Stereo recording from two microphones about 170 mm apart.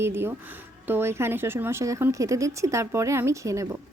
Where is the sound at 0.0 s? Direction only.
15° right (ahead or behind).